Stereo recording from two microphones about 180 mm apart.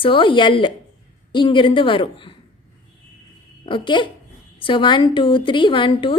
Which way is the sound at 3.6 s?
25° left (ahead or behind).